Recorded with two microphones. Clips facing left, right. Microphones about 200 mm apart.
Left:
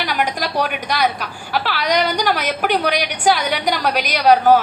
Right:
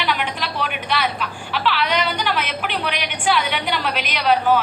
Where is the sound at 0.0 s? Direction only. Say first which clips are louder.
Left 3 dB; 40° left (ahead or behind).